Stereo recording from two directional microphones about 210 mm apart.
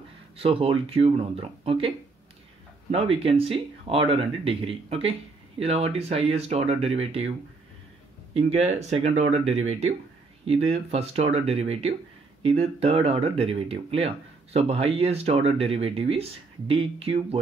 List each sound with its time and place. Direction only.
0.4 s speech: 30° right (ahead or behind)
8.4 s speech: 30° right (ahead or behind)